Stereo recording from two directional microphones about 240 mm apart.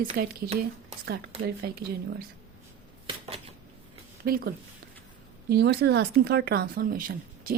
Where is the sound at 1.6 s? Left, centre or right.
Right.